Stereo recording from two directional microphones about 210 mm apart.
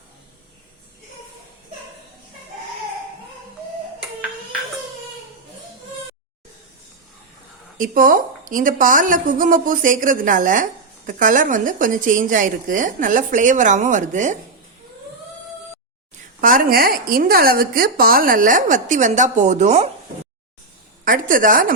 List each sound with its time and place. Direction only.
7.8 s a woman's voice: 40° right (ahead or behind)
16.4 s a woman's voice: 40° right (ahead or behind)
21.0 s a woman's voice: 40° right (ahead or behind)